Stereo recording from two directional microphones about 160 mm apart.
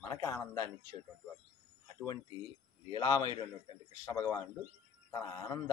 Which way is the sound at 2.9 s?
25° left (ahead or behind).